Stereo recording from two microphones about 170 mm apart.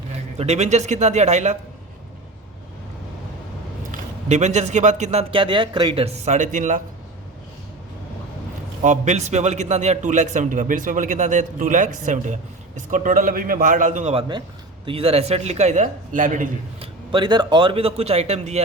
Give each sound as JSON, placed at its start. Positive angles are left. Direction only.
{"t": 0.1, "sound": "a man's voice", "side_deg": -40}
{"t": 4.3, "sound": "a man's voice", "side_deg": -40}
{"t": 8.8, "sound": "a man's voice", "side_deg": -45}
{"t": 16.8, "sound": "a man's voice", "side_deg": -30}